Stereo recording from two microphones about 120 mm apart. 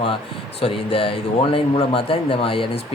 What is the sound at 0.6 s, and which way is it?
A man's voice, 50° left (ahead or behind).